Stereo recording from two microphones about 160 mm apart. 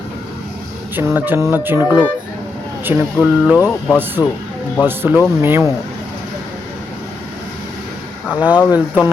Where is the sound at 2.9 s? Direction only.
15° right (ahead or behind).